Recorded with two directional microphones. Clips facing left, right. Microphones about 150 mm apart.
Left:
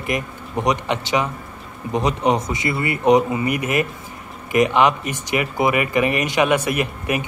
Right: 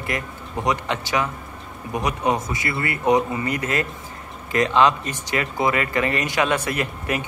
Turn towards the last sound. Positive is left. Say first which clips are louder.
# left 3 dB
turn(degrees=15)  # may be behind; listen again after turning